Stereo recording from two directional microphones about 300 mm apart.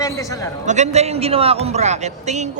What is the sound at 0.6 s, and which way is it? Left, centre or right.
Speech, right.